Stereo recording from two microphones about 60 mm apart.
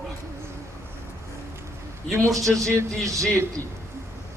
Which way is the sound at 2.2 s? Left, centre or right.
Right.